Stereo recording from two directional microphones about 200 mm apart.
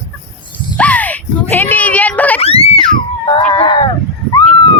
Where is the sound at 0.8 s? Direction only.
5° left (ahead or behind).